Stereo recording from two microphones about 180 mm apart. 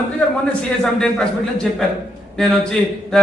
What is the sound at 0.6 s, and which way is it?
A man's voice, 5° left (ahead or behind).